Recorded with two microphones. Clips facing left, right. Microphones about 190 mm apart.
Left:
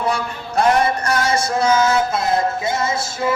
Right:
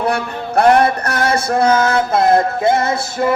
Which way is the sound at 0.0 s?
60° right (ahead or behind).